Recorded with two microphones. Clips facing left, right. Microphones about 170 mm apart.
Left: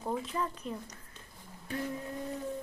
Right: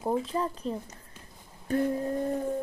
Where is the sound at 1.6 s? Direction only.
45° right (ahead or behind).